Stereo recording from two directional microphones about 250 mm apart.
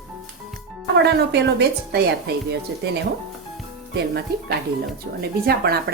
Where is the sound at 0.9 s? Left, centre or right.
Right.